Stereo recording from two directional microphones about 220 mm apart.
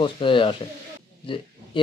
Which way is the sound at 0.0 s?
25° left (ahead or behind).